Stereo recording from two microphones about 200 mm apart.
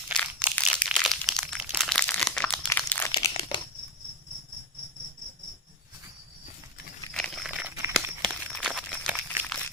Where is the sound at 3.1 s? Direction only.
25° left (ahead or behind).